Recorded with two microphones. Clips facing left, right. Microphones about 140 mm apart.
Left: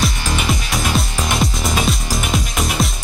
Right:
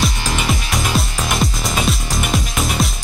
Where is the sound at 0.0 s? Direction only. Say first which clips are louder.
Even; centre (ahead or behind).